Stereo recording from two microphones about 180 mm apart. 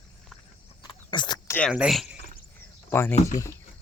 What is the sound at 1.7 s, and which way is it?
Speech, 5° right (ahead or behind).